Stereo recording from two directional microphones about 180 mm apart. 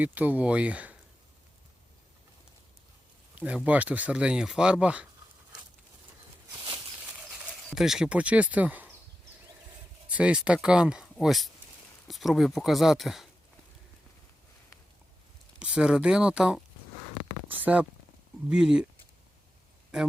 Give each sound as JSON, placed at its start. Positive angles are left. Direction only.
{"t": 0.0, "sound": "speech", "side_deg": -10}
{"t": 3.3, "sound": "speech", "side_deg": -10}
{"t": 6.5, "sound": "walk", "side_deg": -25}
{"t": 7.0, "sound": "bird", "side_deg": -5}
{"t": 7.7, "sound": "speech", "side_deg": 0}
{"t": 10.2, "sound": "speech", "side_deg": -5}
{"t": 15.5, "sound": "speech", "side_deg": -5}
{"t": 17.6, "sound": "speech", "side_deg": -10}